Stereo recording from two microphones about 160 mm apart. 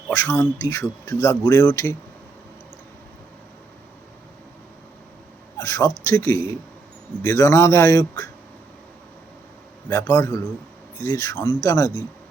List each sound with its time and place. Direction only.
0.1 s speech: 20° left (ahead or behind)
5.6 s speech: 20° left (ahead or behind)
9.9 s a man's voice: 15° left (ahead or behind)